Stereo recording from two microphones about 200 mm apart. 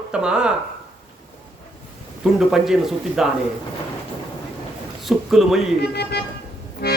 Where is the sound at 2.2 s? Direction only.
Centre (ahead or behind).